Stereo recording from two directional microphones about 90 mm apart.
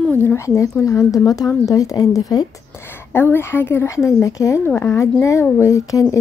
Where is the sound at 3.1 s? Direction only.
25° left (ahead or behind).